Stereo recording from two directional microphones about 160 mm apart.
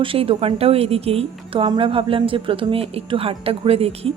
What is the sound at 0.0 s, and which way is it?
A woman's voice, 35° right (ahead or behind).